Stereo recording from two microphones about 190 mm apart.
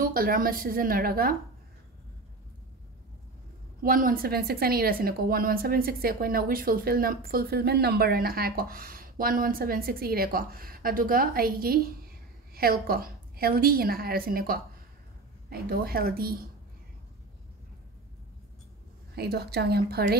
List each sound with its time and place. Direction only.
0.0 s a woman's voice: 50° right (ahead or behind)
3.8 s a woman's voice: 50° right (ahead or behind)
19.1 s a woman's voice: 60° right (ahead or behind)